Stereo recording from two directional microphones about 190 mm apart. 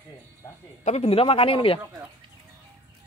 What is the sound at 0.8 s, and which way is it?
Speech, 35° left (ahead or behind).